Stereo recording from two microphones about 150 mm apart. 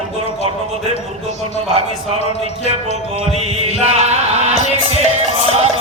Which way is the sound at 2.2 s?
45° left (ahead or behind).